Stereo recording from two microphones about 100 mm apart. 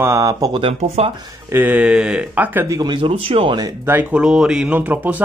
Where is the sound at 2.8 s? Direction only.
55° right (ahead or behind).